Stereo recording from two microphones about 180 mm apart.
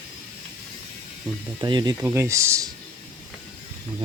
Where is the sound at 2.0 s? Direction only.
15° right (ahead or behind).